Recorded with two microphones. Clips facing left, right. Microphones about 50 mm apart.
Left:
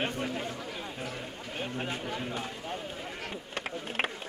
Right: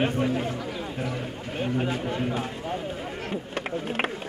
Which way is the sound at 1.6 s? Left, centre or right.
Centre.